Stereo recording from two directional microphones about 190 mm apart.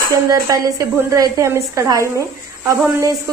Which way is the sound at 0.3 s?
15° right (ahead or behind).